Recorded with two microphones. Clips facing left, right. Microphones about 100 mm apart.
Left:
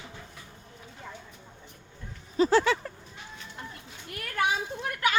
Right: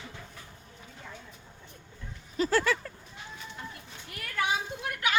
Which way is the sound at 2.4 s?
20° left (ahead or behind).